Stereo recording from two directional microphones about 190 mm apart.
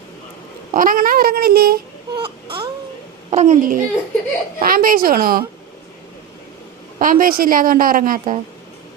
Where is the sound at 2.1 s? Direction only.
25° right (ahead or behind).